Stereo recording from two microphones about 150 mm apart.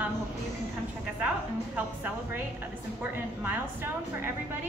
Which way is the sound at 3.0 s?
15° right (ahead or behind).